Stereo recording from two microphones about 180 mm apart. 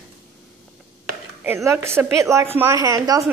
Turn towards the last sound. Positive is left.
turn(degrees=-20)  # may be behind; listen again after turning